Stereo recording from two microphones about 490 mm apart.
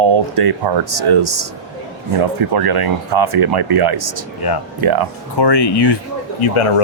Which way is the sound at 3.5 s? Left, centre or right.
Right.